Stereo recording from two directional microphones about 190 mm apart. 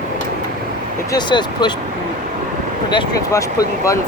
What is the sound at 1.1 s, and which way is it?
Speech, 25° left (ahead or behind).